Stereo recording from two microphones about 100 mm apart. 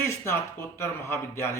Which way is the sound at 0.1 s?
25° left (ahead or behind).